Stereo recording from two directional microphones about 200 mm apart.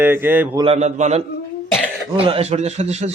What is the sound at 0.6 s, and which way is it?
A man's voice, 30° right (ahead or behind).